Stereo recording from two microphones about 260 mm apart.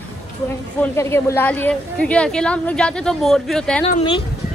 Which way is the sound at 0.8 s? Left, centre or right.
Centre.